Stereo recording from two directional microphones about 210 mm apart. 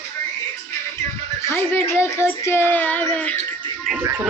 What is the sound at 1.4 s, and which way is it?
Speech, 10° left (ahead or behind).